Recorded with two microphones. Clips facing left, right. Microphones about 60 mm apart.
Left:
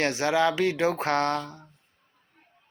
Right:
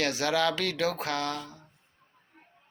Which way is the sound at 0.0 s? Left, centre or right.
Left.